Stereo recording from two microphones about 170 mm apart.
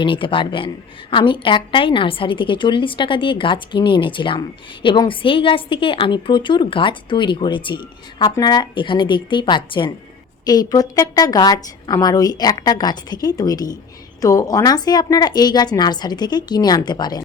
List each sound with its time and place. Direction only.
0.0 s a woman's voice: 30° left (ahead or behind)